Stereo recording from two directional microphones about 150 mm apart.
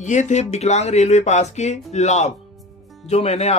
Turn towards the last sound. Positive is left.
turn(degrees=45)  # may be behind; listen again after turning